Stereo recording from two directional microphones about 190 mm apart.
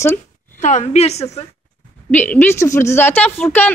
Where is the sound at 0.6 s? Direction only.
35° left (ahead or behind).